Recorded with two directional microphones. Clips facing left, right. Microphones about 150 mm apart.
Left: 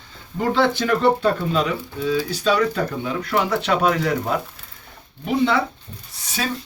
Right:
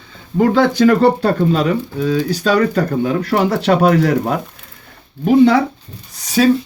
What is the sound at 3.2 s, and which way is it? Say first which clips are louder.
Speech: right 5 dB; 40° right (ahead or behind).